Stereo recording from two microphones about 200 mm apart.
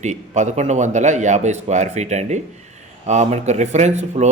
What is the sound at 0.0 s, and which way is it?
Speech, 35° right (ahead or behind).